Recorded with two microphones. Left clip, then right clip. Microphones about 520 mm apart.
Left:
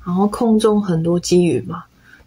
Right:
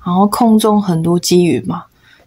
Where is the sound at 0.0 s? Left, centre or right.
Right.